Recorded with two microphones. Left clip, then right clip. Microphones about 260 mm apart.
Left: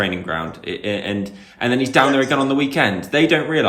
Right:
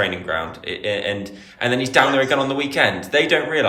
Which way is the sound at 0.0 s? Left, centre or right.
Centre.